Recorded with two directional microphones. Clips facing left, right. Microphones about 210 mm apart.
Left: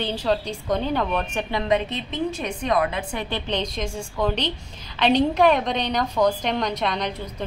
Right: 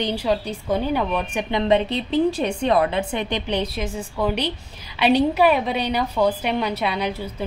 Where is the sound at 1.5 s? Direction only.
30° right (ahead or behind).